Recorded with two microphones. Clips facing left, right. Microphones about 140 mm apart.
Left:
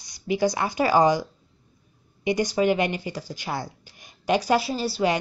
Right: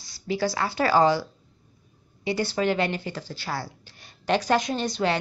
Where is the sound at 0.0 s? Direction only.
15° left (ahead or behind).